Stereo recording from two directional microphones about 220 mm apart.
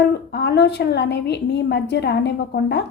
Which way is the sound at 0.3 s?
50° left (ahead or behind).